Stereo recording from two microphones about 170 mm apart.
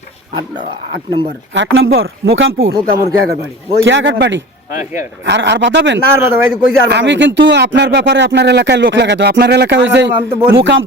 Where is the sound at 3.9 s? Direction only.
90° right.